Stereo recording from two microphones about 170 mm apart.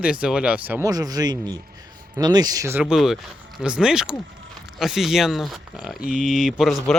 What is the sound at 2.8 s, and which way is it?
Speech, centre (ahead or behind).